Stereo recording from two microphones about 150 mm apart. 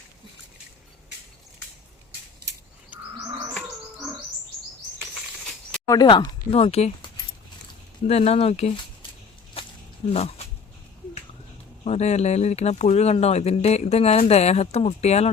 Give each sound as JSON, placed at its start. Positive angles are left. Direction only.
{"t": 5.9, "sound": "speech", "side_deg": 30}
{"t": 8.0, "sound": "speech", "side_deg": 45}
{"t": 9.6, "sound": "a sound", "side_deg": 40}
{"t": 10.1, "sound": "speech", "side_deg": 45}
{"t": 11.9, "sound": "speech", "side_deg": 50}